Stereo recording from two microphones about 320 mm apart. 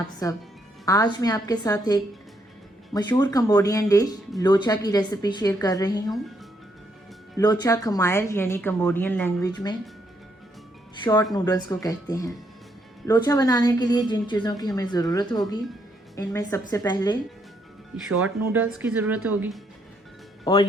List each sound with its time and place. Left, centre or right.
0.2 s speech: centre
7.3 s speech: centre
11.0 s speech: centre
18.1 s speech: right
18.5 s speech: centre
20.4 s speech: centre